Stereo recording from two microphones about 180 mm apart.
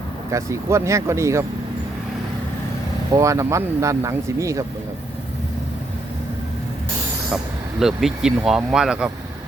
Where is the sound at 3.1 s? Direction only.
15° right (ahead or behind).